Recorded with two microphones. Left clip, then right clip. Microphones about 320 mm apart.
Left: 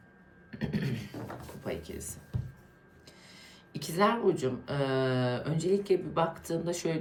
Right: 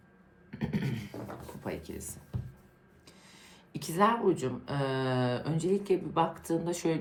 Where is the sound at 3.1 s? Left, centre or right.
Left.